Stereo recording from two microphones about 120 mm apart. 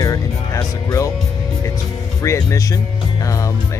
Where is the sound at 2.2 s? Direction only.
25° left (ahead or behind).